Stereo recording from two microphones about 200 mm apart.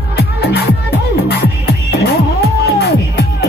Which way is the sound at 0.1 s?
55° left (ahead or behind).